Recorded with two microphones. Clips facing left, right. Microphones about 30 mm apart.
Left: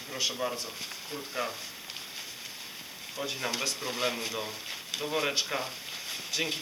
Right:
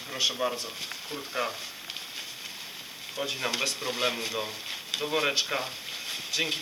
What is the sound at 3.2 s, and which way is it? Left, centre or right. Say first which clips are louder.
Speech: right 3 dB; centre.